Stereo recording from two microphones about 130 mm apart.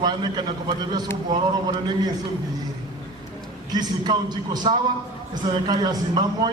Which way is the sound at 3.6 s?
30° right (ahead or behind).